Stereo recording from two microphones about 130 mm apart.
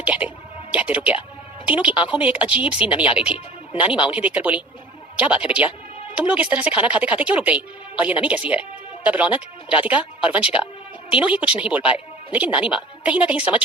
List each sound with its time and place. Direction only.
0.0 s music: 10° right (ahead or behind)
1.6 s a woman's voice: 10° right (ahead or behind)